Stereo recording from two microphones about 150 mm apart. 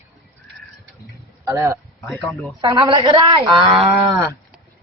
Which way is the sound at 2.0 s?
20° left (ahead or behind).